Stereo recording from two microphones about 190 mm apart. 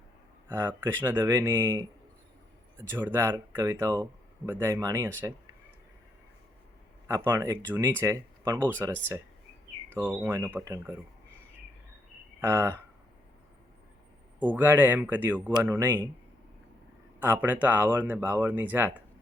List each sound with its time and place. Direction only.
0.4 s a sound: 15° right (ahead or behind)
0.8 s speech: 15° right (ahead or behind)
7.1 s speech: 15° right (ahead or behind)
10.2 s speech: 10° right (ahead or behind)
12.4 s speech: 15° right (ahead or behind)
14.3 s speech: 10° right (ahead or behind)
17.4 s speech: 10° right (ahead or behind)